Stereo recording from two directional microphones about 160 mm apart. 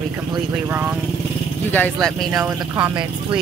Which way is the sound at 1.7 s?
10° left (ahead or behind).